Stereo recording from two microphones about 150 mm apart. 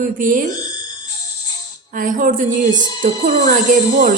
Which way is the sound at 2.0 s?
65° right (ahead or behind).